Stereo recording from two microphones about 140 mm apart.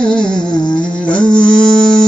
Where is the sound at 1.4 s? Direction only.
5° left (ahead or behind).